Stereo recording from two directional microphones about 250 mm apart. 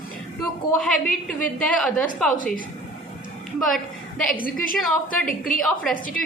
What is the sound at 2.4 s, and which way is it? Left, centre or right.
Speech, left.